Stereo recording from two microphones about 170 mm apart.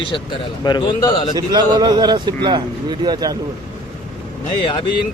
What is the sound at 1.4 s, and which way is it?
Speech, 25° right (ahead or behind).